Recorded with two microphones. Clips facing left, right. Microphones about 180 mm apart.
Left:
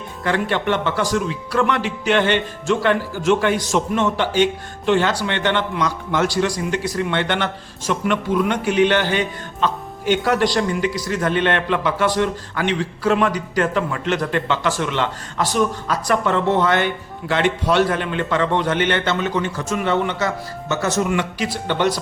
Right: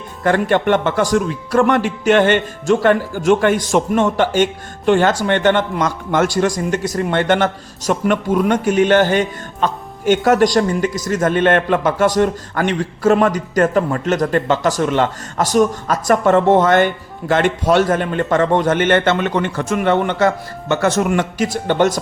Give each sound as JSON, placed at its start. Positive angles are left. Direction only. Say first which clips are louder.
{"t": 0.3, "sound": "a man's voice", "louder": "right 6 dB", "side_deg": -50}